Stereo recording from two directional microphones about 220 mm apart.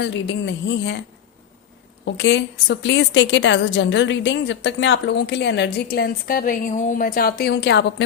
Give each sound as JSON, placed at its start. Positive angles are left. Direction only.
{"t": 0.0, "sound": "a woman's voice", "side_deg": 55}
{"t": 2.0, "sound": "a woman's voice", "side_deg": 55}